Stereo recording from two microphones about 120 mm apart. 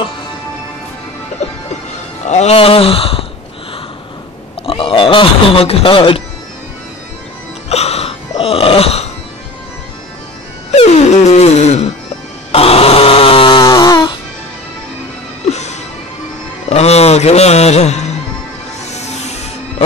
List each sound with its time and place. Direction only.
1.4 s music: 80° left
2.2 s speech: 70° left (ahead or behind); by 3.3 s 50° left (ahead or behind)
4.6 s speech: 50° left (ahead or behind)
7.7 s burping: 60° left (ahead or behind)
10.7 s wail: 65° left (ahead or behind)
12.5 s chainsaw: 55° left (ahead or behind); by 14.1 s 35° left (ahead or behind)
15.4 s music: 70° left (ahead or behind)